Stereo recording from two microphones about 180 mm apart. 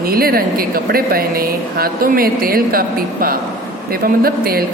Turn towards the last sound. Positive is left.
turn(degrees=-55)  # may be behind; listen again after turning